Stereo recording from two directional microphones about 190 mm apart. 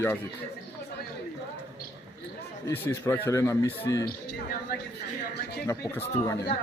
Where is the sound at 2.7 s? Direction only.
10° left (ahead or behind).